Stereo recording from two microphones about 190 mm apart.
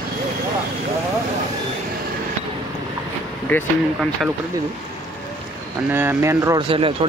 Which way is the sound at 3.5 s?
10° left (ahead or behind).